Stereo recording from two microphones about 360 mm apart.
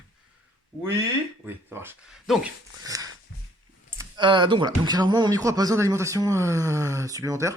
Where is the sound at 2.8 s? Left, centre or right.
Centre.